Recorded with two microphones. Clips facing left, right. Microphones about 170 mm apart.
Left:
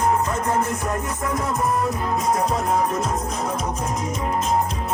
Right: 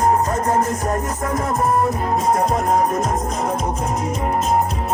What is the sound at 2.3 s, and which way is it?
Music, 45° right (ahead or behind).